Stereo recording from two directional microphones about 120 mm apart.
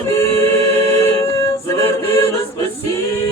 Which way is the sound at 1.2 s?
25° left (ahead or behind).